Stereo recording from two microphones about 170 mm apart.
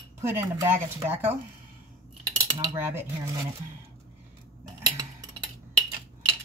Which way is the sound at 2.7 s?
15° right (ahead or behind).